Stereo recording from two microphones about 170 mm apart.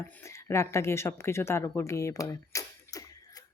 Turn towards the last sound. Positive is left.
turn(degrees=20)  # may be behind; listen again after turning